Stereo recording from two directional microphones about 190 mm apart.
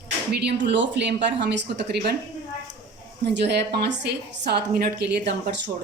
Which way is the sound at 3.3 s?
65° right (ahead or behind).